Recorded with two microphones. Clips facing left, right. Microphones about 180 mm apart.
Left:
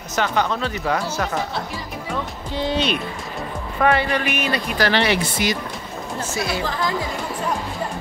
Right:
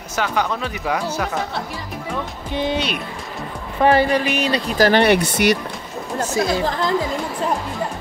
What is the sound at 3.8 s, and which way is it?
Speech, 35° right (ahead or behind).